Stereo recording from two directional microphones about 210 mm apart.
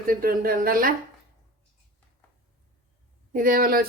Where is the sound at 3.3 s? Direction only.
40° right (ahead or behind).